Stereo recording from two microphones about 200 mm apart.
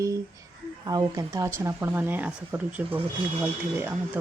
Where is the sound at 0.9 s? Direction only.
20° right (ahead or behind).